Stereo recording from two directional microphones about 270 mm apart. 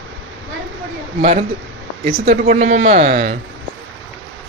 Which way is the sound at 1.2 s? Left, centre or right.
Right.